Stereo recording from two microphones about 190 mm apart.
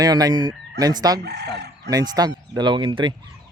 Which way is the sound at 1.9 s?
20° right (ahead or behind).